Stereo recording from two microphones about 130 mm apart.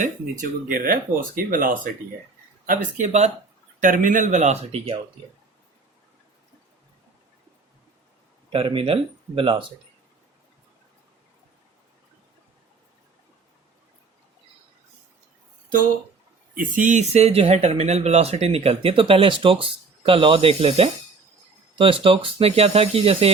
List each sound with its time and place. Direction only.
0.7 s speech: 90° right
2.6 s speech: 65° right (ahead or behind)
3.8 s speech: 90° right; by 4.9 s 55° right (ahead or behind)
8.5 s speech: 45° right (ahead or behind)
16.6 s speech: 80° right; by 23.3 s 50° right (ahead or behind)